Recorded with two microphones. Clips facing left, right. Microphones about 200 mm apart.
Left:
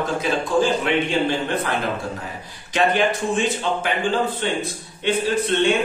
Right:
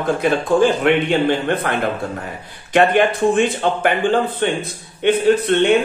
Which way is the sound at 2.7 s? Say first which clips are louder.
Right 5 dB; 60° right (ahead or behind).